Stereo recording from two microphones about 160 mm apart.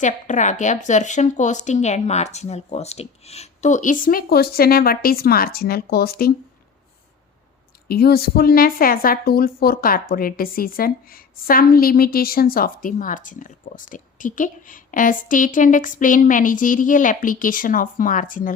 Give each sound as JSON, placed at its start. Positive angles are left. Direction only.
{"t": 0.0, "sound": "speech", "side_deg": 50}
{"t": 7.9, "sound": "a woman's voice", "side_deg": 75}